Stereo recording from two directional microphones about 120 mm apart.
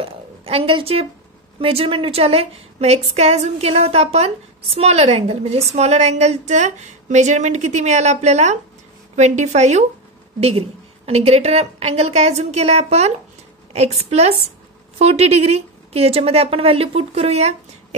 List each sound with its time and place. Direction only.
0.0 s a sound: 50° right (ahead or behind)
1.6 s a woman's voice: 50° right (ahead or behind); by 9.8 s 70° right (ahead or behind)
10.4 s a woman's voice: 55° right (ahead or behind)